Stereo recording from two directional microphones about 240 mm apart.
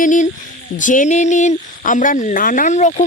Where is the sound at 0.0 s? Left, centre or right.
Left.